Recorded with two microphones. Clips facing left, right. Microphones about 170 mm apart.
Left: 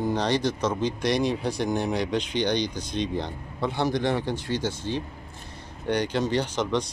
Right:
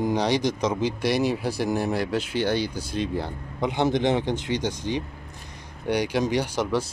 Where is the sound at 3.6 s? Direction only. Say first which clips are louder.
Right 3 dB; 20° right (ahead or behind).